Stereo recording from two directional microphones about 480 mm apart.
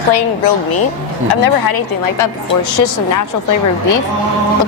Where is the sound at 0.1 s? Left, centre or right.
Left.